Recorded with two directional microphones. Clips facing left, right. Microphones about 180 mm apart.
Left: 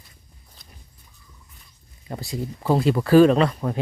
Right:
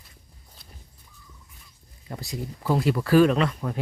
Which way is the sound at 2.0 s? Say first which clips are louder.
Left 4 dB; 30° left (ahead or behind).